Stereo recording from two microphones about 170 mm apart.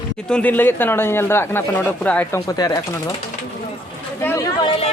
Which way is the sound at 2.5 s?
20° left (ahead or behind).